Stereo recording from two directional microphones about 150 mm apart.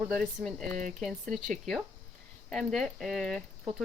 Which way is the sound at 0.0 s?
5° left (ahead or behind).